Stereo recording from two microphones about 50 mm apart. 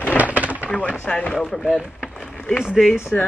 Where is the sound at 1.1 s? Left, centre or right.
Centre.